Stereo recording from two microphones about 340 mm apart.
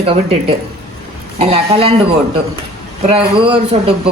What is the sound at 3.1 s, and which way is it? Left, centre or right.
Speech, centre.